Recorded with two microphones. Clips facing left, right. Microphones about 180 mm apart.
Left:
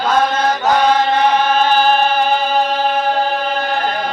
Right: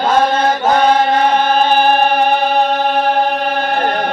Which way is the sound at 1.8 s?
65° right (ahead or behind).